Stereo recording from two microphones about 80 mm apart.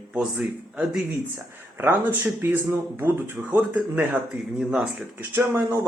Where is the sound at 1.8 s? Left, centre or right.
Right.